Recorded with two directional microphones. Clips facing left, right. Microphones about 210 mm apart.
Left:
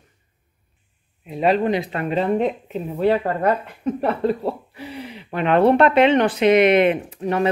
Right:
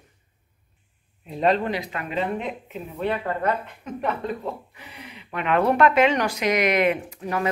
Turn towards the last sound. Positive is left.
turn(degrees=30)  # may be behind; listen again after turning